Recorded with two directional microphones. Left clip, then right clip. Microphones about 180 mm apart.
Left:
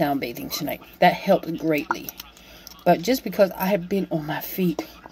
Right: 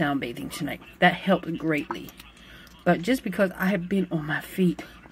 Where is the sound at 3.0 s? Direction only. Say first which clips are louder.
Left 5 dB; 40° left (ahead or behind).